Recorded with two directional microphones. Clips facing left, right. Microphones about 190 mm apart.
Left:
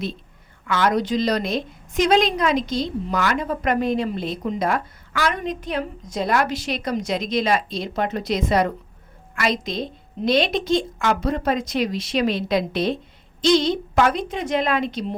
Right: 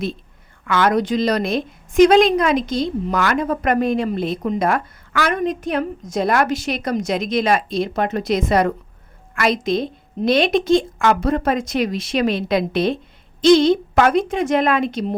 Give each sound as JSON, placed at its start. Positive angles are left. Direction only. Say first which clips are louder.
{"t": 0.6, "sound": "a woman's voice", "louder": "right 3 dB", "side_deg": -55}